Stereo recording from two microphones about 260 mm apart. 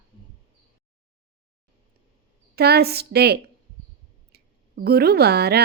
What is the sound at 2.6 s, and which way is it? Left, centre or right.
Speech, right.